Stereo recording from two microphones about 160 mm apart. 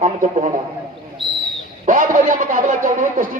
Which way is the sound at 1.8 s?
55° right (ahead or behind).